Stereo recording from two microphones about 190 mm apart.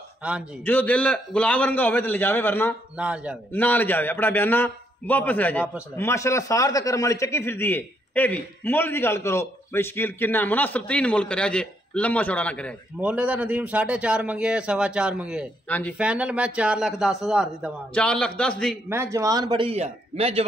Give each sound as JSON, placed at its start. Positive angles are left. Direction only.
{"t": 0.7, "sound": "a man's voice", "side_deg": 10}
{"t": 3.0, "sound": "a man's voice", "side_deg": -5}
{"t": 3.5, "sound": "a man's voice", "side_deg": 10}
{"t": 13.0, "sound": "a man's voice", "side_deg": -10}
{"t": 18.9, "sound": "a man's voice", "side_deg": -15}